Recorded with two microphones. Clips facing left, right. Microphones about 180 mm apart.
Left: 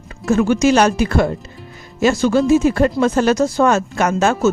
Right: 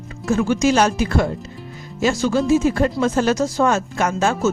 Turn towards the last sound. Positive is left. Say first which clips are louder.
# left 3 dB
turn(degrees=70)  # may be behind; listen again after turning